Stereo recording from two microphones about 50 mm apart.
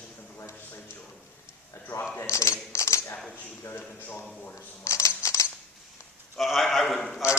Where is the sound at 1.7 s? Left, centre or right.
Left.